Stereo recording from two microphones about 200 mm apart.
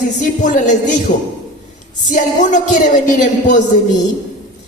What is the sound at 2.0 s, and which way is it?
Speech, 40° left (ahead or behind).